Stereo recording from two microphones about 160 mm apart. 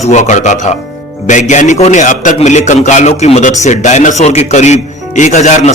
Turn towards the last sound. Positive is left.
turn(degrees=50)  # may be behind; listen again after turning